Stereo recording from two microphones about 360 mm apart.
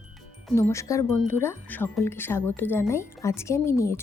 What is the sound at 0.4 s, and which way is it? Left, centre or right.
Speech, centre.